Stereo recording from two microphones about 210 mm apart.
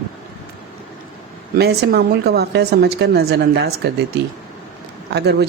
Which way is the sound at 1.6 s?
50° right (ahead or behind).